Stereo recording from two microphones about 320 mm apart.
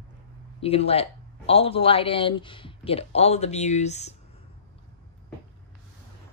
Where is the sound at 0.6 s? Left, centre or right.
Centre.